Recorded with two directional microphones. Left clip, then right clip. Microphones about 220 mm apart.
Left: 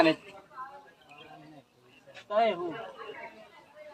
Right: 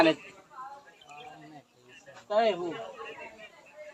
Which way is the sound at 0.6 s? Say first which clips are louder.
Even; 50° left (ahead or behind).